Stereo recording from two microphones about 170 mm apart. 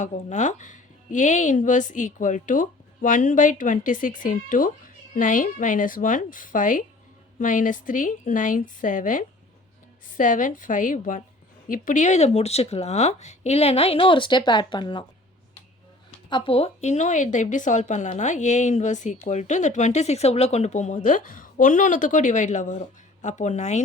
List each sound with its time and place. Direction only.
0.0 s speech: 45° left (ahead or behind); by 15.0 s 25° left (ahead or behind)
16.3 s speech: 30° left (ahead or behind)